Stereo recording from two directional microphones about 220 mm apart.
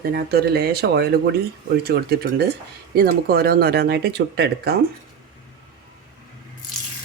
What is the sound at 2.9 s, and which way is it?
Speech, 45° right (ahead or behind).